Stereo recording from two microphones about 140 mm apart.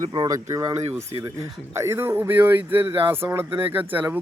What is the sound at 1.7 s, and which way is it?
Speech, 20° right (ahead or behind).